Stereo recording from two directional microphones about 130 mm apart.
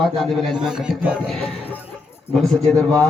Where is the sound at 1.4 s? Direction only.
10° left (ahead or behind).